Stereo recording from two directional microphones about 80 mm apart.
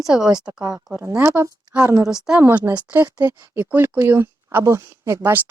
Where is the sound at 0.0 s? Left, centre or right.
Centre.